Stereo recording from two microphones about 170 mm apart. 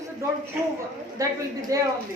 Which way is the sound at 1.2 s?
20° right (ahead or behind).